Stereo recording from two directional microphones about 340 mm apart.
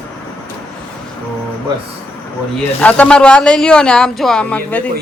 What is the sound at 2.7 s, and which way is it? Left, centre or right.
Speech, centre.